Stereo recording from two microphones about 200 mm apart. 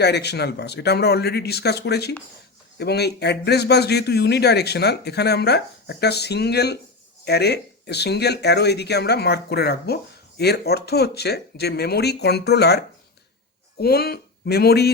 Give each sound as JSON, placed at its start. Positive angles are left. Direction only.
{"t": 0.0, "sound": "speech", "side_deg": 55}